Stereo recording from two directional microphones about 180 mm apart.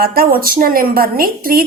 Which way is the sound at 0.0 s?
55° right (ahead or behind).